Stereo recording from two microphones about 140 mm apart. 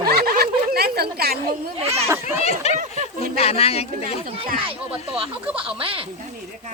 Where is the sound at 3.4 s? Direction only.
45° left (ahead or behind).